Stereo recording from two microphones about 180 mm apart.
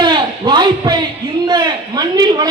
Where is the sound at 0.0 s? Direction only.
25° right (ahead or behind).